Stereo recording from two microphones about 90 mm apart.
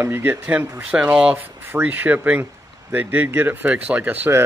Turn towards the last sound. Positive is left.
turn(degrees=-20)  # may be behind; listen again after turning